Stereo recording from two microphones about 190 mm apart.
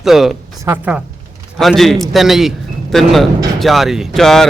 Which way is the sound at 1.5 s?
Centre (ahead or behind).